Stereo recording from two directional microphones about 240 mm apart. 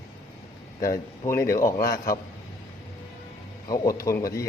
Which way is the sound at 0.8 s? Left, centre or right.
Centre.